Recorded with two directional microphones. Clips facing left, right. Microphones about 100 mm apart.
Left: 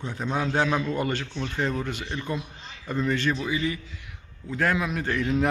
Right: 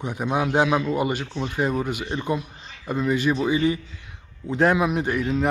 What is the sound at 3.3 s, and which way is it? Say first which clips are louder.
A man's voice: right 7 dB; 25° right (ahead or behind).